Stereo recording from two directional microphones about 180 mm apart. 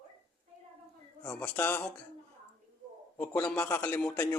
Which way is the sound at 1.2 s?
10° left (ahead or behind).